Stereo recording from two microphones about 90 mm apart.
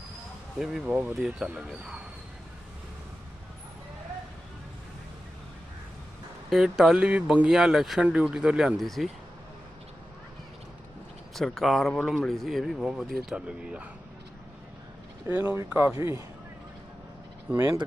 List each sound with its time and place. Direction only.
0.6 s speech: 5° right (ahead or behind)
6.5 s speech: 5° right (ahead or behind)
11.3 s speech: 5° left (ahead or behind)
15.3 s speech: 20° right (ahead or behind)
16.0 s speech: 35° right (ahead or behind)
17.5 s speech: 25° right (ahead or behind)